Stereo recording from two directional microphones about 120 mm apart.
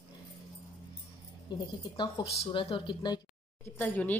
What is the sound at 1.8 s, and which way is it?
Speech, 40° left (ahead or behind).